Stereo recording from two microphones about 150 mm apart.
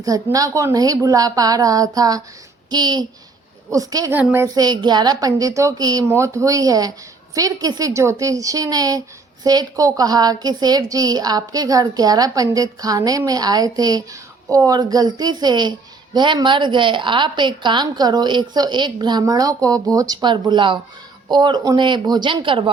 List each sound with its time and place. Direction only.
0.0 s a woman's voice: 25° right (ahead or behind)
4.1 s a woman's voice: 10° right (ahead or behind); by 22.7 s 35° right (ahead or behind)